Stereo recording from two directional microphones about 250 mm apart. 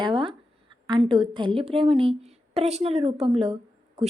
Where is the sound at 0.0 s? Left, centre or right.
Right.